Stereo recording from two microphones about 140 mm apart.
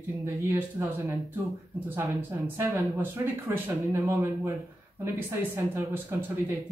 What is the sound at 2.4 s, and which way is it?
Speech, 15° right (ahead or behind).